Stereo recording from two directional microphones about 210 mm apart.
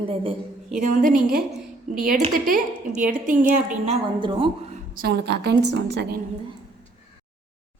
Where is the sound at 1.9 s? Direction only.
40° right (ahead or behind).